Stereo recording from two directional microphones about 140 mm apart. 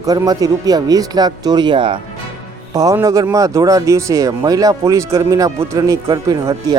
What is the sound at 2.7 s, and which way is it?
Speech, 25° right (ahead or behind).